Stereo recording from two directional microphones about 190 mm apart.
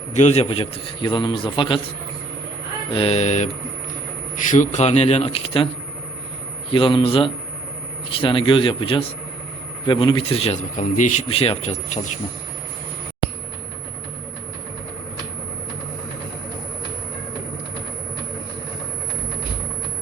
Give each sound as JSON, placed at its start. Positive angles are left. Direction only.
{"t": 0.1, "sound": "a man's voice", "side_deg": 35}
{"t": 2.9, "sound": "a man's voice", "side_deg": 30}
{"t": 4.5, "sound": "a man's voice", "side_deg": 40}
{"t": 6.7, "sound": "a man's voice", "side_deg": 25}